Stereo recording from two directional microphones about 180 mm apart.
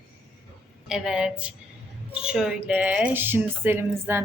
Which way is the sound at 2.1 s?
5° right (ahead or behind).